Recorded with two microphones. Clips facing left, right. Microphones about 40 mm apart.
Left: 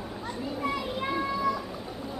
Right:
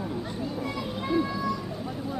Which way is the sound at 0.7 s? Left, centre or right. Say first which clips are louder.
Even; centre.